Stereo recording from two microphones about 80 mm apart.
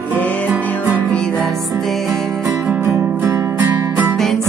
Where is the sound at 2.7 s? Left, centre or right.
Right.